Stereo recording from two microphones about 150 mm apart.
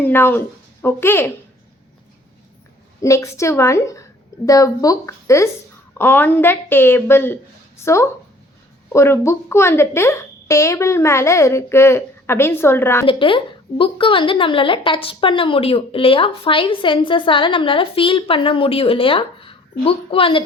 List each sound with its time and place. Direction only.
0.0 s a woman's voice: 15° left (ahead or behind)
3.0 s a woman's voice: 20° left (ahead or behind)
13.1 s a woman's voice: 35° left (ahead or behind)